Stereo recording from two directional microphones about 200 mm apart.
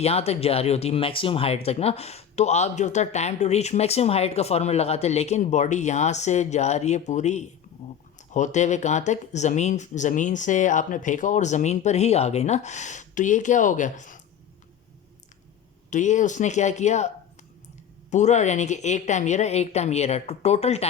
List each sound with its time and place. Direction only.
0.0 s speech: 30° left (ahead or behind)
15.9 s speech: 40° left (ahead or behind)
18.1 s speech: 35° left (ahead or behind)